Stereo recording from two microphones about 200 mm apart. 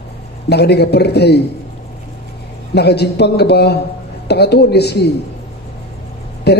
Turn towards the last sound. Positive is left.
turn(degrees=55)  # may be behind; listen again after turning